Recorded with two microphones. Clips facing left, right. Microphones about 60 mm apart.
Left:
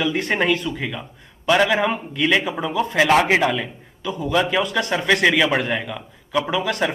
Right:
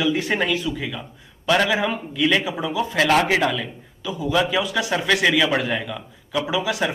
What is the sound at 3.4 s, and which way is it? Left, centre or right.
Speech, centre.